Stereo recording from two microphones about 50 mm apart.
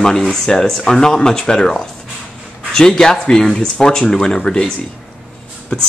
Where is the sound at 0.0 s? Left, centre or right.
Centre.